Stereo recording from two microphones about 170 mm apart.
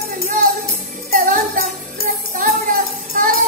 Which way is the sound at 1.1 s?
60° right (ahead or behind).